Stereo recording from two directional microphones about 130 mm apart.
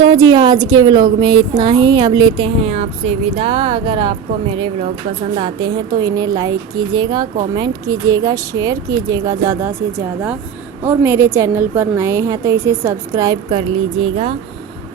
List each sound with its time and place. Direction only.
0.0 s speech: 35° right (ahead or behind)
2.6 s a woman's voice: 55° right (ahead or behind); by 9.7 s 20° right (ahead or behind)
10.8 s a woman's voice: 20° right (ahead or behind)
13.6 s speech: 45° right (ahead or behind)